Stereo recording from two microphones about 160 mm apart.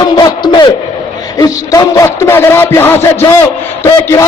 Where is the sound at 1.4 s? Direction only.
20° left (ahead or behind).